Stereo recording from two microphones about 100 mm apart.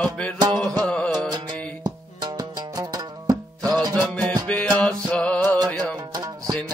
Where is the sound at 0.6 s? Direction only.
10° left (ahead or behind).